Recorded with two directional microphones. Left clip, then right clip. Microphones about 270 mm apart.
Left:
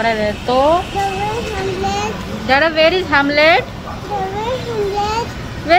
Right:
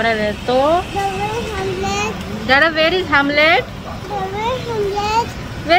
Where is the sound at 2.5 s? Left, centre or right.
Centre.